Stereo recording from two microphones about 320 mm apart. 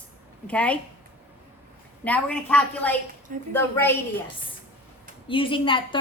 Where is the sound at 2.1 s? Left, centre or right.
Centre.